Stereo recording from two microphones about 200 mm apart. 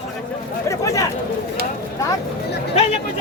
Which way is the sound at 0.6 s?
15° left (ahead or behind).